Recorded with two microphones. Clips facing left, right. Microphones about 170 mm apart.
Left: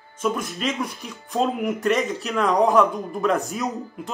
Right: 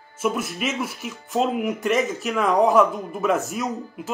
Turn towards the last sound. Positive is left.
turn(degrees=0)  # may be behind; listen again after turning